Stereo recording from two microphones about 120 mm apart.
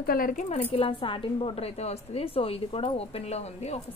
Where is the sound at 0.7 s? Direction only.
45° left (ahead or behind).